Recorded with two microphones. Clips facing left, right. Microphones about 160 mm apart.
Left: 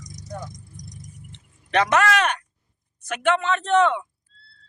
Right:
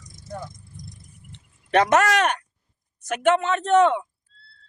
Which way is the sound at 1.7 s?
45° right (ahead or behind).